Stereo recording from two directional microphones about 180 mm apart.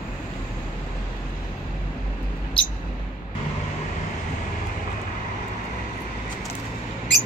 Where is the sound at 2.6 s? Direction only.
30° left (ahead or behind).